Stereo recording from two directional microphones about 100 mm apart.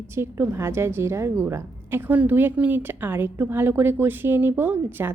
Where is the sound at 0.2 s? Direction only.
25° right (ahead or behind).